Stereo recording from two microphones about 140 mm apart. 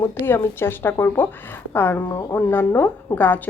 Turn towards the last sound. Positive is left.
turn(degrees=15)  # may be behind; listen again after turning